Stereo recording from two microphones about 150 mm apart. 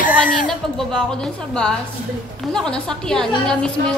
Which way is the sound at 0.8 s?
5° left (ahead or behind).